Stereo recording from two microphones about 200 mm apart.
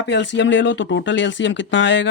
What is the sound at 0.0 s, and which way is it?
Speech, 65° left (ahead or behind).